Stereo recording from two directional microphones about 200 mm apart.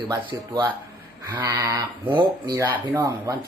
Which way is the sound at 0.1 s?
20° right (ahead or behind).